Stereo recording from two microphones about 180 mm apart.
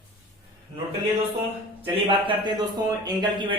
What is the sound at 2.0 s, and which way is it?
Speech, 25° right (ahead or behind).